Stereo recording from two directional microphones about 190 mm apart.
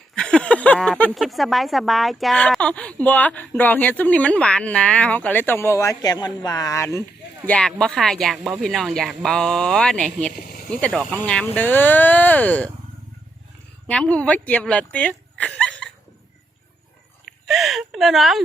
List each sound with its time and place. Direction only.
0.2 s speech: 5° left (ahead or behind)
7.4 s speech: 5° left (ahead or behind)
10.4 s a sound: 50° left (ahead or behind)
10.7 s speech: 5° left (ahead or behind)
13.9 s speech: 5° left (ahead or behind)
17.4 s speech: centre (ahead or behind)